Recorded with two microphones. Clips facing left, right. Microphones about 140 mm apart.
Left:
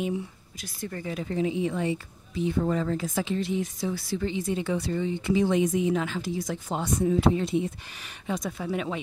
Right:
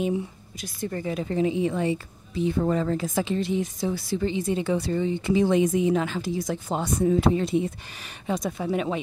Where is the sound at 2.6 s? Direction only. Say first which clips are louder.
Right 2 dB; 40° right (ahead or behind).